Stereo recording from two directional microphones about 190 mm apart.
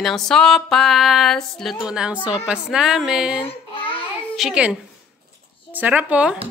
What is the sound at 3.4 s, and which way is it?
Babbling, 25° left (ahead or behind).